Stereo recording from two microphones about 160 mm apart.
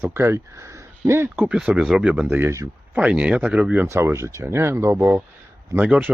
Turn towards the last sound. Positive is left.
turn(degrees=-5)  # may be behind; listen again after turning